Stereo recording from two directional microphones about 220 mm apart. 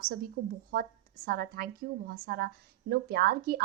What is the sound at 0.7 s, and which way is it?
A woman's voice, 40° right (ahead or behind).